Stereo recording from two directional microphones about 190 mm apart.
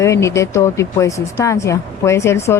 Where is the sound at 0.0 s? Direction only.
15° left (ahead or behind).